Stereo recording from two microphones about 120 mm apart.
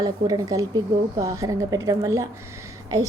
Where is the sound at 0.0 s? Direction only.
30° right (ahead or behind).